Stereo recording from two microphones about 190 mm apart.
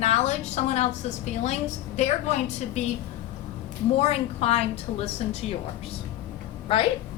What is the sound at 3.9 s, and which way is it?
A woman's voice, 35° left (ahead or behind).